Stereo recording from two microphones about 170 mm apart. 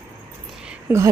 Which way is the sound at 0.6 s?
15° right (ahead or behind).